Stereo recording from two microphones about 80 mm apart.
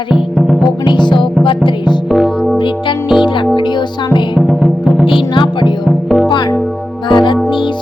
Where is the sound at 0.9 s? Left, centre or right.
Left.